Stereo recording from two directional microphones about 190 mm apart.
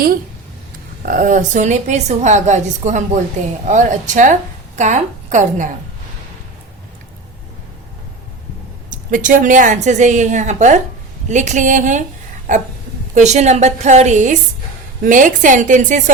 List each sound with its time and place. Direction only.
1.0 s a woman's voice: 45° right (ahead or behind)
8.9 s a woman's voice: 45° right (ahead or behind)